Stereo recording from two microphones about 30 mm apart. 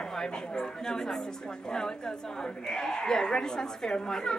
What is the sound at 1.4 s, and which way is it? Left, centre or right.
Speech, left.